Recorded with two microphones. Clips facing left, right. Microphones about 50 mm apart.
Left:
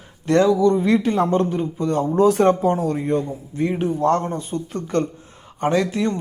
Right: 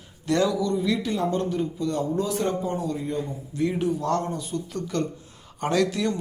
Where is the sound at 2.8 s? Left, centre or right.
Left.